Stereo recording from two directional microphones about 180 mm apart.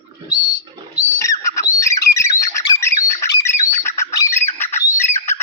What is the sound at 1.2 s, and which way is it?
Bird, 15° left (ahead or behind).